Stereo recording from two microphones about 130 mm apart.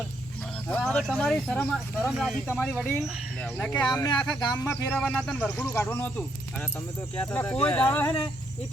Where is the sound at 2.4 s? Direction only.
15° left (ahead or behind).